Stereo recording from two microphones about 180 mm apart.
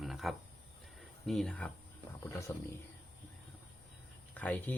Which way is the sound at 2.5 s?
15° left (ahead or behind).